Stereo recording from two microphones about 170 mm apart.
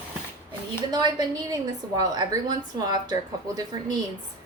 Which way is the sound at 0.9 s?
25° right (ahead or behind).